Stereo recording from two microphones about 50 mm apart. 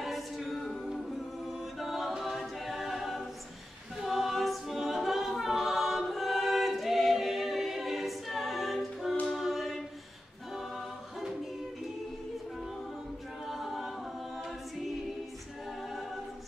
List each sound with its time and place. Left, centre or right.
0.0 s a capella: centre
1.5 s a capella: centre
9.2 s choir: centre
10.5 s music: centre
13.5 s a capella: centre